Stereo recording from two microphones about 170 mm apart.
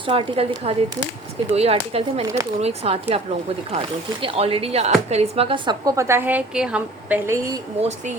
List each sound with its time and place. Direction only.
0.1 s speech: 35° right (ahead or behind)
2.2 s speech: 15° right (ahead or behind)
2.6 s speech: 35° right (ahead or behind); by 7.3 s 10° right (ahead or behind)
7.8 s speech: 40° right (ahead or behind)